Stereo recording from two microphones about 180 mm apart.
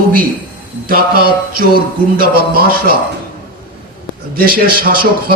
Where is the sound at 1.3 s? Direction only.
55° right (ahead or behind).